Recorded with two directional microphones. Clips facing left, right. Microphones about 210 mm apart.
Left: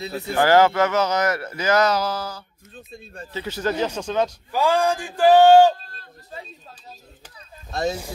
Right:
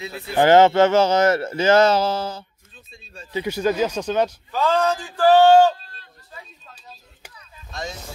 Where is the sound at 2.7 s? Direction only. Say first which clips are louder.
Left 7 dB; 60° left (ahead or behind).